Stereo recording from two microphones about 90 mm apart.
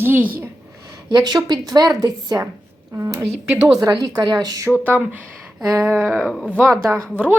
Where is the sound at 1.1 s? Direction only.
45° right (ahead or behind).